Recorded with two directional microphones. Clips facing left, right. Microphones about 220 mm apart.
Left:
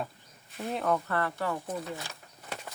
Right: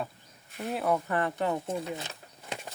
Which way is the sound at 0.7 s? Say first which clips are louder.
Right 1 dB; 5° right (ahead or behind).